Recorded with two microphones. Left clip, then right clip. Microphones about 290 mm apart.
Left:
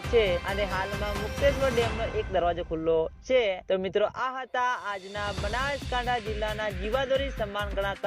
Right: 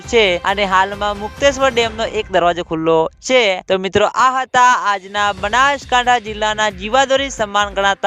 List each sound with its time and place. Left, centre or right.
0.1 s speech: right